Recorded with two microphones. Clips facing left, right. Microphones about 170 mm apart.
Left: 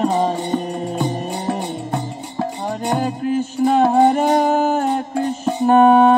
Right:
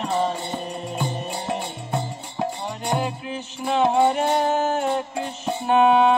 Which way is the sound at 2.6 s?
50° left (ahead or behind).